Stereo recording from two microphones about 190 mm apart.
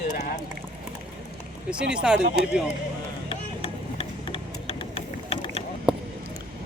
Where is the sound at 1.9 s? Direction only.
5° right (ahead or behind).